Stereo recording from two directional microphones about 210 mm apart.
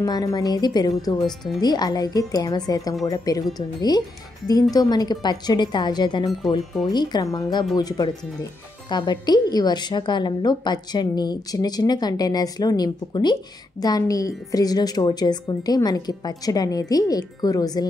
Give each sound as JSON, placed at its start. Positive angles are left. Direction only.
{"t": 0.0, "sound": "a woman's voice", "side_deg": 20}